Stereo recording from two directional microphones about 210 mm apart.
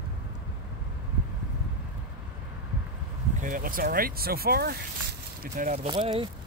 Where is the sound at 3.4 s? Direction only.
40° right (ahead or behind).